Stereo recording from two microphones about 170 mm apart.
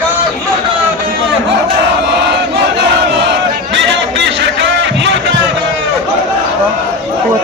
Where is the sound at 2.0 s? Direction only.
90° right.